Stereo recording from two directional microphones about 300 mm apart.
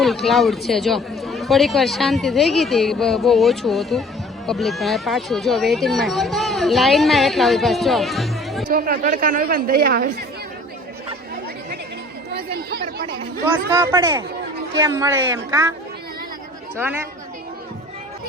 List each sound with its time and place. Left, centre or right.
0.0 s speech: centre
8.7 s speech: right
12.3 s chatter: right
13.7 s speech: centre
16.7 s speech: centre